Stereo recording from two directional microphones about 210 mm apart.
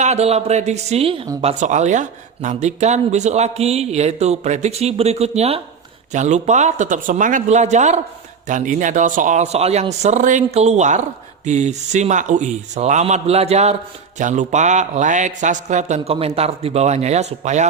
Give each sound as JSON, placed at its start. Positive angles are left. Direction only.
{"t": 0.0, "sound": "speech", "side_deg": -30}